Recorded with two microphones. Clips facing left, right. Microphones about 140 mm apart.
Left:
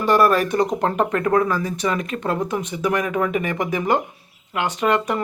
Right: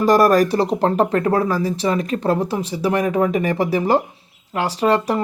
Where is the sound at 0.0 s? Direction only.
40° right (ahead or behind).